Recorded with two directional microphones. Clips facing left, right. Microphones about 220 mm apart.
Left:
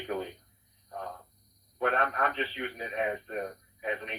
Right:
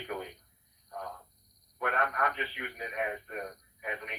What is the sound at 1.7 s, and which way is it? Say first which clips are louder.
Speech: left 4 dB; 30° left (ahead or behind).